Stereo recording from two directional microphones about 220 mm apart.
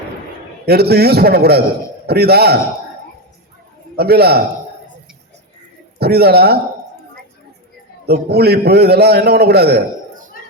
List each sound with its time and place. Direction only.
0.6 s a man's voice: 45° right (ahead or behind)
3.9 s a man's voice: 45° right (ahead or behind)
6.0 s a man's voice: 45° right (ahead or behind)
8.0 s a man's voice: 45° right (ahead or behind)